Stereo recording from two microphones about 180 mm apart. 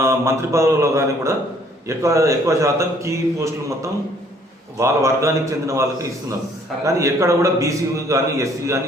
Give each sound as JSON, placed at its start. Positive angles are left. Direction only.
{"t": 0.0, "sound": "a man's voice", "side_deg": -15}
{"t": 4.8, "sound": "a man's voice", "side_deg": -15}